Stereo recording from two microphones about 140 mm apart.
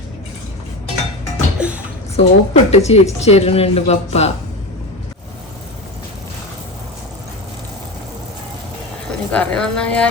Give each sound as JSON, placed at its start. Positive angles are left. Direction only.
{"t": 1.5, "sound": "a sound", "side_deg": -10}
{"t": 2.1, "sound": "speech", "side_deg": 50}
{"t": 9.3, "sound": "speech", "side_deg": 5}